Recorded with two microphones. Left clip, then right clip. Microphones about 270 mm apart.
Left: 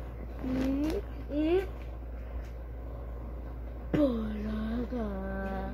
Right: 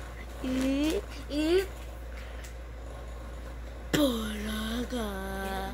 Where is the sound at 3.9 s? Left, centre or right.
Centre.